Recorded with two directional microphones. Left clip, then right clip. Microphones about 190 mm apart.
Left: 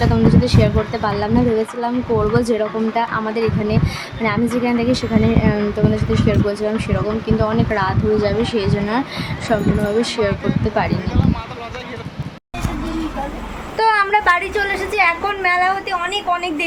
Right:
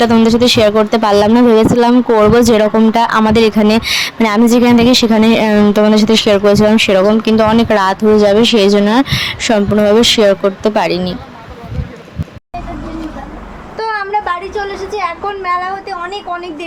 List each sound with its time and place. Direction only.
0.0 s speech: 45° right (ahead or behind)
13.7 s a woman's voice: centre (ahead or behind)